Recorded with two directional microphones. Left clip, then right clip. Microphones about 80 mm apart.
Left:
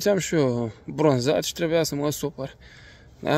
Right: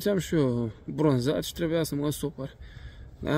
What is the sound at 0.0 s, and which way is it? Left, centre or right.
Speech, right.